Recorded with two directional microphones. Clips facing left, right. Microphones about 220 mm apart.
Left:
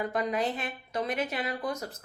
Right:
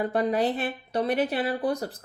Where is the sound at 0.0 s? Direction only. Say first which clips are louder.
Right 5 dB; 30° right (ahead or behind).